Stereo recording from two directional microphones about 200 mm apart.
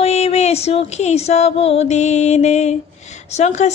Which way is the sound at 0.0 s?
30° left (ahead or behind).